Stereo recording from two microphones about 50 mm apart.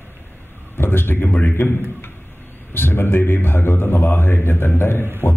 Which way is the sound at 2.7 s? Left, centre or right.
Left.